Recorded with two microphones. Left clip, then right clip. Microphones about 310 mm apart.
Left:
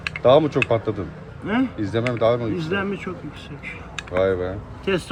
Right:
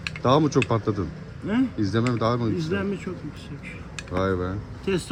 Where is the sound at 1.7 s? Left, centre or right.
Centre.